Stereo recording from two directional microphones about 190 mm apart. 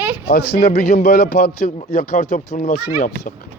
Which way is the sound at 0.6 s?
55° left (ahead or behind).